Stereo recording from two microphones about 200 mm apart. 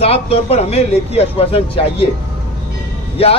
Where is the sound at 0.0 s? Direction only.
30° left (ahead or behind).